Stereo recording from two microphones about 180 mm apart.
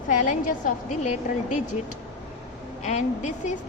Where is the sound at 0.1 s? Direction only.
45° left (ahead or behind).